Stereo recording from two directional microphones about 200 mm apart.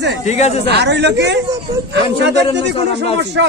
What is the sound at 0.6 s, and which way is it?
Speech, 60° right (ahead or behind).